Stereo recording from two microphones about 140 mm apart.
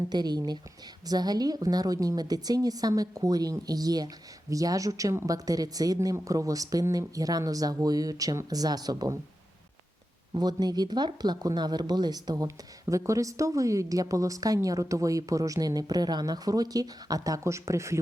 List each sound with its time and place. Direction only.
0.1 s a woman's voice: 30° right (ahead or behind)
10.3 s a woman's voice: 30° right (ahead or behind)